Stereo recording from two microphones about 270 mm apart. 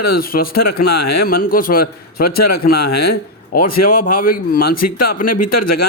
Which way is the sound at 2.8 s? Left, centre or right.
Left.